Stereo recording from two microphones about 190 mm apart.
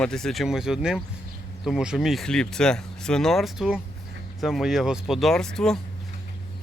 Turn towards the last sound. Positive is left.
turn(degrees=5)  # may be behind; listen again after turning